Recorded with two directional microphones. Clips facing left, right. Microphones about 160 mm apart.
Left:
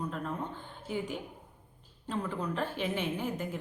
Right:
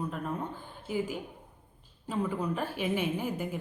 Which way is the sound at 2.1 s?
10° right (ahead or behind).